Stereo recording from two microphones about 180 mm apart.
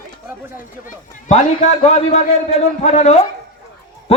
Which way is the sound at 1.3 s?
40° left (ahead or behind).